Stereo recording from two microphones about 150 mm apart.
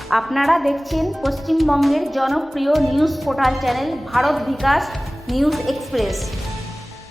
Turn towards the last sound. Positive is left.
turn(degrees=0)  # may be behind; listen again after turning